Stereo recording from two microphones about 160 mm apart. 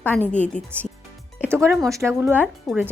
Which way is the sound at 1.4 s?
15° right (ahead or behind).